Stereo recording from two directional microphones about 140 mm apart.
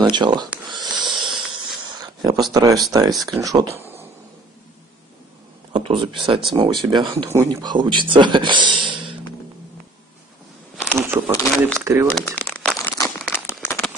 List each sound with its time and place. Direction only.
0.0 s speech: 35° right (ahead or behind)
0.7 s wheeze: 30° right (ahead or behind)
1.9 s a sound: 30° right (ahead or behind)
2.9 s speech: 25° right (ahead or behind)
5.7 s speech: 40° right (ahead or behind)
10.9 s speech: 15° right (ahead or behind)
12.1 s crumpling: 10° left (ahead or behind)